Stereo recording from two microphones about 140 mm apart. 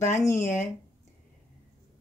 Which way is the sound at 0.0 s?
20° left (ahead or behind).